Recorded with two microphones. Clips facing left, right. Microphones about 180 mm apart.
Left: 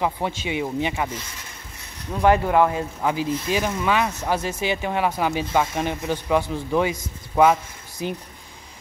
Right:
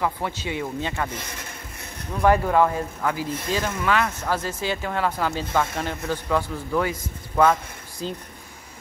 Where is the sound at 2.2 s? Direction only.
20° left (ahead or behind).